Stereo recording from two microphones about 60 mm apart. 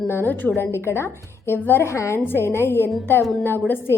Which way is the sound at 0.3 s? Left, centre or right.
Left.